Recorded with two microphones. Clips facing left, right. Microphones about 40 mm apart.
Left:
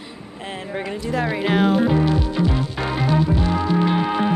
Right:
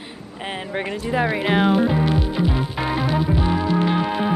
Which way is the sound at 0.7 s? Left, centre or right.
Right.